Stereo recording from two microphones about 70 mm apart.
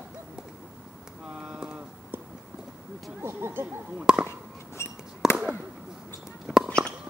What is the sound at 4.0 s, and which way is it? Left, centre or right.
Speech, centre.